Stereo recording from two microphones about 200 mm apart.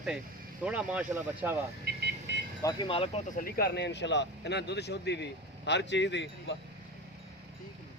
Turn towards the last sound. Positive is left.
turn(degrees=65)  # may be behind; listen again after turning